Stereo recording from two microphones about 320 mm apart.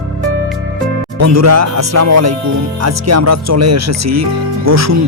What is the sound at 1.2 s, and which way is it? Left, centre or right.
Speech, right.